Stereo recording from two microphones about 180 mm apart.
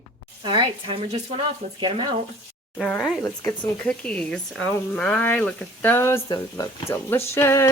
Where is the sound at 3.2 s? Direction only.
15° left (ahead or behind).